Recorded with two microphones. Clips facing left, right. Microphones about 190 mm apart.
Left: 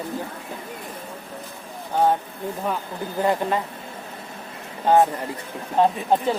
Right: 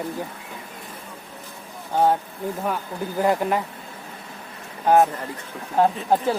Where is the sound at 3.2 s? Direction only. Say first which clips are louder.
Right 1 dB; 15° right (ahead or behind).